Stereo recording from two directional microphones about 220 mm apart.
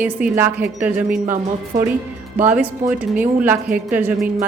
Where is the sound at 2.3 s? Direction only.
5° right (ahead or behind).